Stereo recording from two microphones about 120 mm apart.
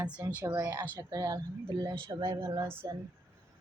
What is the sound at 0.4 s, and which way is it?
Speech, 25° right (ahead or behind).